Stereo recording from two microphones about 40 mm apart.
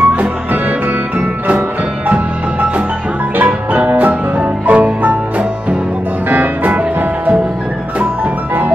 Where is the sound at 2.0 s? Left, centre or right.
Right.